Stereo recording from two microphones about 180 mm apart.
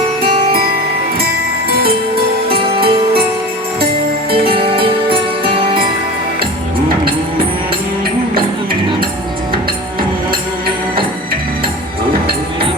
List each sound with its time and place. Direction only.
2.5 s music: 30° right (ahead or behind)
4.3 s music: 30° right (ahead or behind)